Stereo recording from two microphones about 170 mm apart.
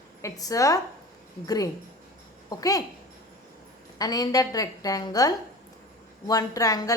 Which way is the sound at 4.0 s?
20° left (ahead or behind).